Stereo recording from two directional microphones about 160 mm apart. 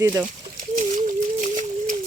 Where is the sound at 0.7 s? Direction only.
55° right (ahead or behind).